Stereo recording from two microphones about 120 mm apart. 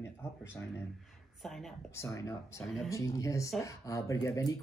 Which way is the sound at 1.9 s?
25° left (ahead or behind).